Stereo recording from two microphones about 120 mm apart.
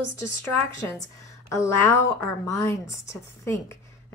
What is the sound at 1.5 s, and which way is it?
A woman's voice, 25° left (ahead or behind).